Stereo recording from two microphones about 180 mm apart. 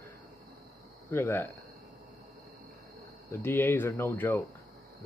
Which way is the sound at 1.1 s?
15° left (ahead or behind).